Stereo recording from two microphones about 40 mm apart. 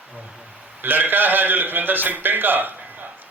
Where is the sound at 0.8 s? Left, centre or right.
Right.